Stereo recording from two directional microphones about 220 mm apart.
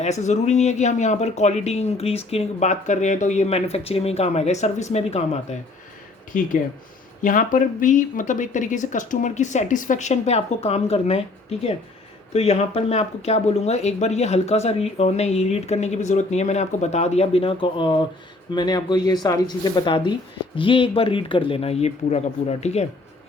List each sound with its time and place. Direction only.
0.0 s speech: 30° left (ahead or behind)